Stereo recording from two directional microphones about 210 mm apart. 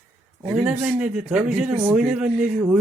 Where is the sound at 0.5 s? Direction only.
5° right (ahead or behind).